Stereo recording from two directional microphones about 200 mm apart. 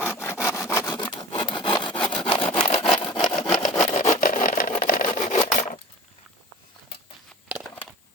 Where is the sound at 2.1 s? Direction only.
25° left (ahead or behind).